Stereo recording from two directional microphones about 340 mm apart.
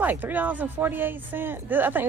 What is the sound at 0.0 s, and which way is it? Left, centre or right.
Speech, centre.